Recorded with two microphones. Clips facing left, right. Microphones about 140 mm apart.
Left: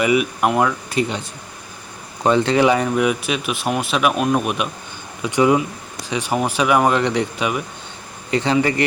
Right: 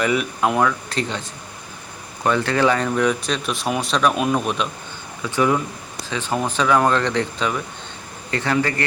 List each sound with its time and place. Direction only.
0.0 s speech: 10° left (ahead or behind)
2.2 s speech: 20° left (ahead or behind)